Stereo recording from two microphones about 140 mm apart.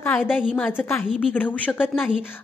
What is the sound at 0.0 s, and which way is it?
A woman's voice, 10° left (ahead or behind).